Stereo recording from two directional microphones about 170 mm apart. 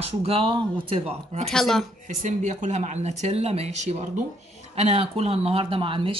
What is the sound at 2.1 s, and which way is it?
A man's voice, 45° right (ahead or behind).